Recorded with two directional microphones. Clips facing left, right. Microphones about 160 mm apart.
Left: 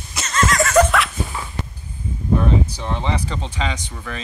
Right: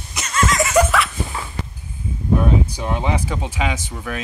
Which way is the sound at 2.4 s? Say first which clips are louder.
Right 1 dB; 10° right (ahead or behind).